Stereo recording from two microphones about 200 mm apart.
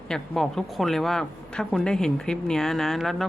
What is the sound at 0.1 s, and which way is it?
Speech, centre (ahead or behind).